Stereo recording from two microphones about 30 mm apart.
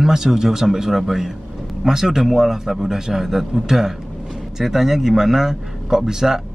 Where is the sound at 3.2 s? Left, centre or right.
Centre.